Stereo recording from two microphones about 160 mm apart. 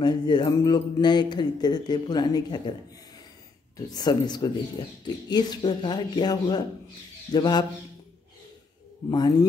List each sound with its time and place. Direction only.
0.0 s speech: 30° left (ahead or behind)
3.7 s speech: 25° left (ahead or behind)
9.1 s speech: 25° left (ahead or behind)